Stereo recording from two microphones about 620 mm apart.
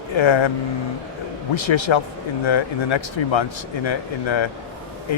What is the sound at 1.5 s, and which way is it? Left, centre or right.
Speech, left.